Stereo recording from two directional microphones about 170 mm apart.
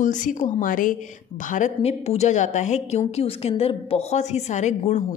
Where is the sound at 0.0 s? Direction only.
45° left (ahead or behind).